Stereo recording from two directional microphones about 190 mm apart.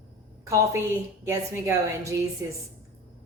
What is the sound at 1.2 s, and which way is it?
Speech, 15° right (ahead or behind).